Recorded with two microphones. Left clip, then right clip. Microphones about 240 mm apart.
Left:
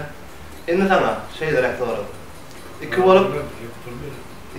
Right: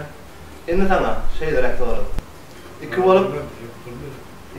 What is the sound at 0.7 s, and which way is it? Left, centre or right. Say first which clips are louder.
A man's voice: left 2 dB; centre.